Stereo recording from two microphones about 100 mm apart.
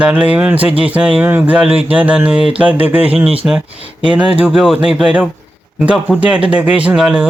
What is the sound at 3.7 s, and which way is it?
Speech, 70° right (ahead or behind).